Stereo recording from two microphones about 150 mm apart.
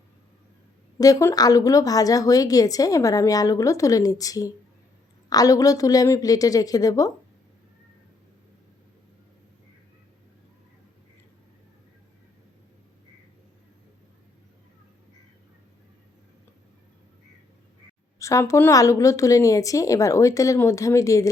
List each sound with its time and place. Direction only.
0.9 s a woman's voice: 25° left (ahead or behind)
18.2 s a woman's voice: 20° left (ahead or behind)